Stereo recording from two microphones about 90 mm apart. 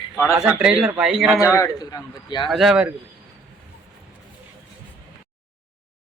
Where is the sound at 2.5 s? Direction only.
Centre (ahead or behind).